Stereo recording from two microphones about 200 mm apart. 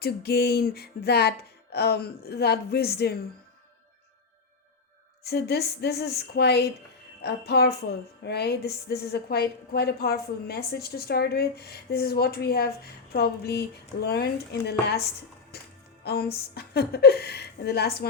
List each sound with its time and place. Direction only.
0.0 s a woman's voice: 55° left (ahead or behind)
5.2 s a woman's voice: 55° left (ahead or behind)
15.5 s music: 50° left (ahead or behind)
16.0 s a woman's voice: 50° left (ahead or behind)